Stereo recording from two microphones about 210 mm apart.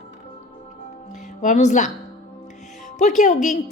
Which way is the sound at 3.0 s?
35° left (ahead or behind).